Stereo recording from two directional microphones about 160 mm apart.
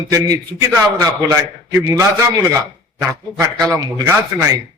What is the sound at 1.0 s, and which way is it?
A man's voice, 20° right (ahead or behind).